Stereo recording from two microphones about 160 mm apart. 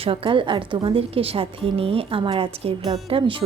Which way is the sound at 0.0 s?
35° right (ahead or behind).